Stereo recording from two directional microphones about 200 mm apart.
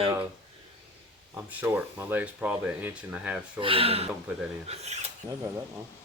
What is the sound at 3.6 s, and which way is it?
Speech, 25° right (ahead or behind).